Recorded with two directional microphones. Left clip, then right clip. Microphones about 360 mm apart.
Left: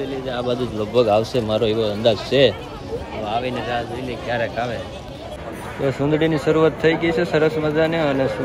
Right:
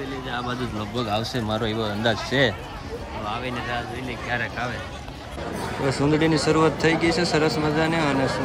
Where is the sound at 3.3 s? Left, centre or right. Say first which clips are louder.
Left 7 dB; centre.